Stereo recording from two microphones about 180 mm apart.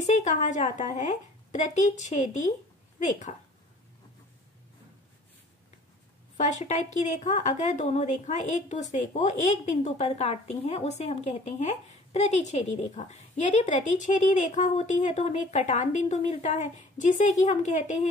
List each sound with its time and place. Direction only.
0.0 s a woman's voice: 40° left (ahead or behind)
6.3 s a woman's voice: 40° left (ahead or behind)